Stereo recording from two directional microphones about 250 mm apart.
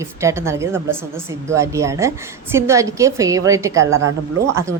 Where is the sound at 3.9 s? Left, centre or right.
Right.